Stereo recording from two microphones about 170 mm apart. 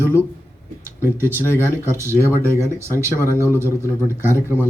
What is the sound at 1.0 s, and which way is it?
Speech, 15° right (ahead or behind).